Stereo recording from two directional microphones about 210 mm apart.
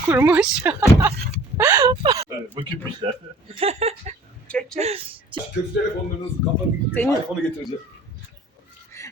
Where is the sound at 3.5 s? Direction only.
30° right (ahead or behind).